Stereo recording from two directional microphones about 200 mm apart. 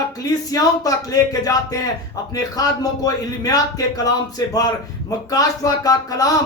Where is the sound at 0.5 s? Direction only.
15° left (ahead or behind).